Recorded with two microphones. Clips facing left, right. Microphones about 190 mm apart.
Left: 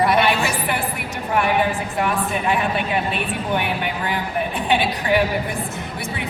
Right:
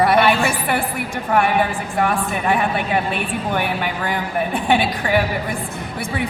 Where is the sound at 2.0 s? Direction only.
50° right (ahead or behind).